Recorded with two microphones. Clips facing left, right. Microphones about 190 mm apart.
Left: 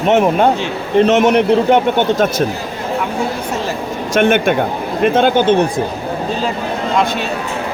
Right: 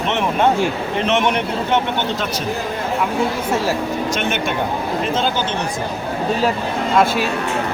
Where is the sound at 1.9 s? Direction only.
50° left (ahead or behind).